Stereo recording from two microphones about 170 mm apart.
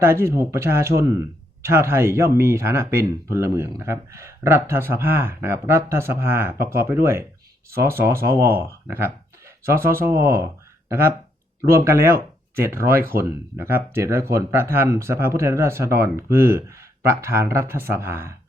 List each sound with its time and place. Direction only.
0.0 s speech: 15° right (ahead or behind)